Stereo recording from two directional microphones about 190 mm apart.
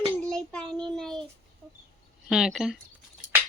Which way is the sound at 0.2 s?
5° left (ahead or behind).